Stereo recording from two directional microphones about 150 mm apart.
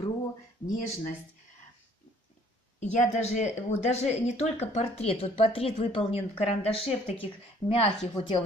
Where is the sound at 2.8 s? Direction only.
50° left (ahead or behind).